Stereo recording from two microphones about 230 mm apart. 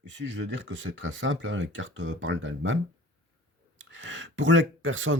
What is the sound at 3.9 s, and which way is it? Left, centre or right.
Speech, right.